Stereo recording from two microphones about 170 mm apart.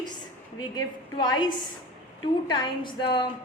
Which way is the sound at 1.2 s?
25° left (ahead or behind).